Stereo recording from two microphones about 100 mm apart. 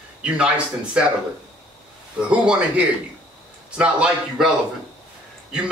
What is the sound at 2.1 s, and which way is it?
A man's voice, 10° right (ahead or behind).